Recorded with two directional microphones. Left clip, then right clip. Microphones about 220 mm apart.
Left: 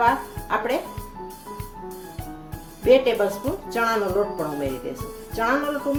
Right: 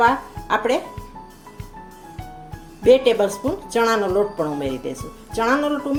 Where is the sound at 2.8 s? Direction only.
35° right (ahead or behind).